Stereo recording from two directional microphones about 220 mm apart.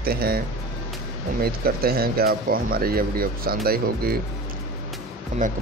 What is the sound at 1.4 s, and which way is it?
Speech, 45° right (ahead or behind).